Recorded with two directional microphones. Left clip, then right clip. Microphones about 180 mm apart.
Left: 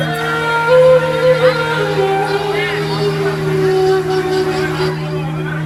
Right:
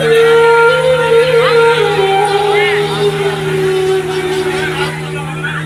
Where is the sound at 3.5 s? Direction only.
45° left (ahead or behind).